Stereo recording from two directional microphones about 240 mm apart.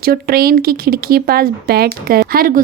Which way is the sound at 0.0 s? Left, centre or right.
Right.